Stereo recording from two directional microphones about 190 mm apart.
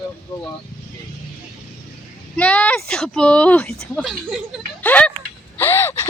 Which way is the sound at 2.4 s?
5° left (ahead or behind).